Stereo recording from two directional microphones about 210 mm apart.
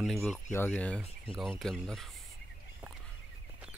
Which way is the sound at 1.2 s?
10° right (ahead or behind).